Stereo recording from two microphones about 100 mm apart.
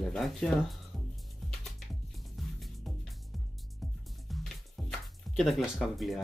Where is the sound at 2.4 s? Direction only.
Centre (ahead or behind).